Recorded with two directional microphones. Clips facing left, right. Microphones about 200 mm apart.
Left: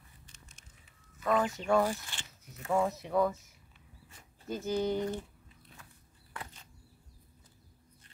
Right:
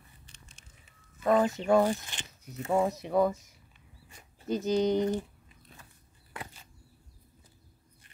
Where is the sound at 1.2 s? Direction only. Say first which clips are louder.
Right 5 dB; 30° right (ahead or behind).